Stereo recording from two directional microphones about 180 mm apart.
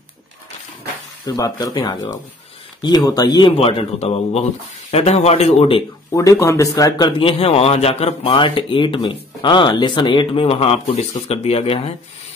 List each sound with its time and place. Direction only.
1.2 s a man's voice: 20° left (ahead or behind)
6.1 s a man's voice: 15° left (ahead or behind); by 11.9 s 35° left (ahead or behind)